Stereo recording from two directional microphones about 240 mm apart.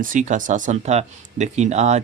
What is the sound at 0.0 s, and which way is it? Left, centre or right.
Speech, right.